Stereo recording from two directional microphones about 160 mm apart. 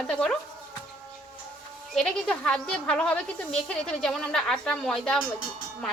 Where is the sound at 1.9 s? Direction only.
5° left (ahead or behind).